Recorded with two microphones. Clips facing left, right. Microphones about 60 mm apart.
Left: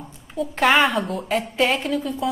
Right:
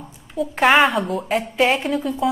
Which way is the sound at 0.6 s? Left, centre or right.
Centre.